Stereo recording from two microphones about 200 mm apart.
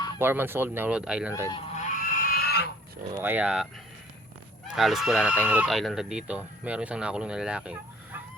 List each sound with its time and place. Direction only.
0.2 s speech: 10° right (ahead or behind)
1.7 s pig: 40° left (ahead or behind)
3.1 s speech: 10° right (ahead or behind)
4.7 s speech: centre (ahead or behind)